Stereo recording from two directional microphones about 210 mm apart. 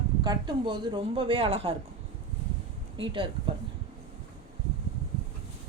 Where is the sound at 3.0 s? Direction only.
25° right (ahead or behind).